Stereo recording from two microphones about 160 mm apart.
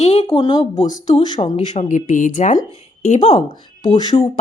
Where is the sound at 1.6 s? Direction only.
40° left (ahead or behind).